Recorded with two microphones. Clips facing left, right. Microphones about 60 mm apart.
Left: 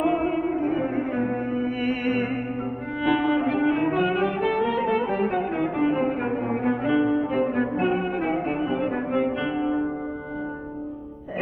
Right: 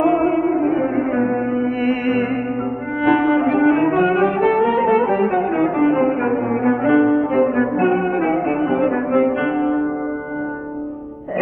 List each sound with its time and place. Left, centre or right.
0.0 s music: right
4.1 s brass instrument: right
7.0 s music: right
7.3 s brass instrument: right
8.5 s music: right